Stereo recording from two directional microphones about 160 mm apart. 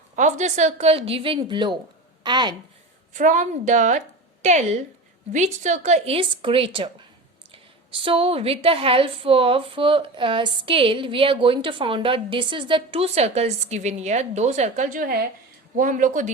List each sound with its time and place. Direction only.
0.2 s a woman's voice: 50° right (ahead or behind); by 2.6 s 30° right (ahead or behind)
3.1 s a woman's voice: 55° right (ahead or behind)